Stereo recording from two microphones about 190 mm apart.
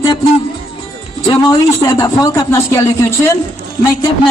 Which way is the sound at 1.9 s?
20° left (ahead or behind).